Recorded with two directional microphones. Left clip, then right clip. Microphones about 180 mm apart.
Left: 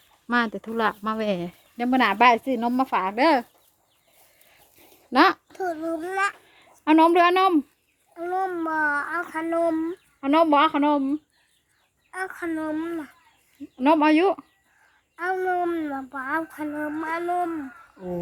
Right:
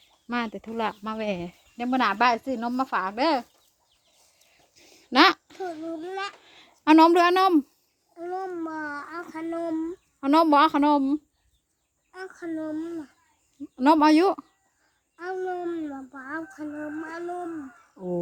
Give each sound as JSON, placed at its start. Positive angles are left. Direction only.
{"t": 0.3, "sound": "speech", "side_deg": 10}
{"t": 4.8, "sound": "a sound", "side_deg": 0}
{"t": 5.5, "sound": "speech", "side_deg": 10}
{"t": 6.4, "sound": "speech", "side_deg": -20}
{"t": 8.1, "sound": "speech", "side_deg": 5}
{"t": 10.2, "sound": "speech", "side_deg": -25}
{"t": 12.1, "sound": "speech", "side_deg": 20}
{"t": 13.7, "sound": "speech", "side_deg": -25}
{"t": 15.1, "sound": "speech", "side_deg": 15}